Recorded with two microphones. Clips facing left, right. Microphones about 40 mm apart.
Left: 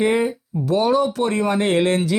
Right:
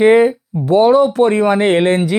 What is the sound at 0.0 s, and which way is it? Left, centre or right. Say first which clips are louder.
Speech: right 9 dB; right.